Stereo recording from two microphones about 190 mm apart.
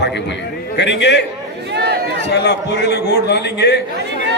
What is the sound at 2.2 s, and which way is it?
A man's voice, 60° left (ahead or behind).